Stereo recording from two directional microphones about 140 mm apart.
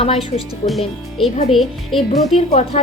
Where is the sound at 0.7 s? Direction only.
Centre (ahead or behind).